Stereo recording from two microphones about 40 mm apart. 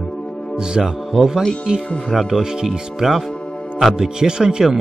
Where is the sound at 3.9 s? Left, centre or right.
Centre.